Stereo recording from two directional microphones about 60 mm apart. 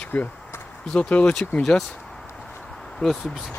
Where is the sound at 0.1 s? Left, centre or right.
Left.